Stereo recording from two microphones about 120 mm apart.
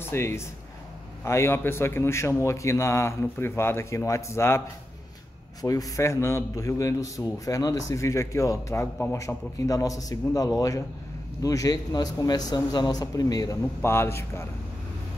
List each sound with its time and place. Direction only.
0.0 s a man's voice: 20° left (ahead or behind)
13.7 s a man's voice: 20° left (ahead or behind)